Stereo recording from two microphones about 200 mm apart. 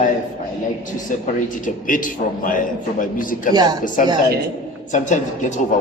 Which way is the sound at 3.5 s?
20° right (ahead or behind).